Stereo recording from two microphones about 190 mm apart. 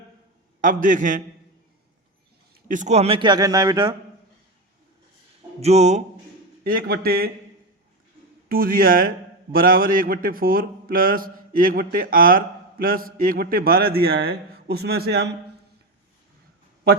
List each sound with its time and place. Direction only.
0.6 s a man's voice: 45° right (ahead or behind)
2.6 s a man's voice: 40° right (ahead or behind); by 3.9 s 20° right (ahead or behind)
5.5 s speech: 35° right (ahead or behind)
6.7 s a man's voice: 50° right (ahead or behind)
8.4 s a man's voice: 50° right (ahead or behind)